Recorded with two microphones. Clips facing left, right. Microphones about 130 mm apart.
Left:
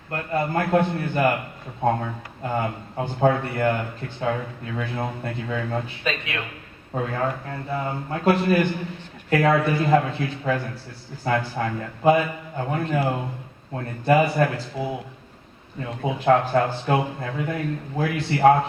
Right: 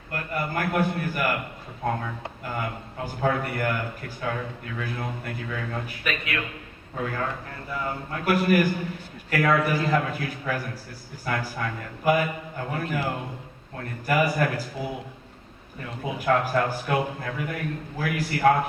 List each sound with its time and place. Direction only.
0.1 s speech: 25° left (ahead or behind)